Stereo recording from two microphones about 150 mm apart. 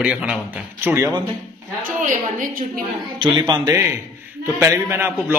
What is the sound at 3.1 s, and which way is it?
A man's voice, 30° right (ahead or behind).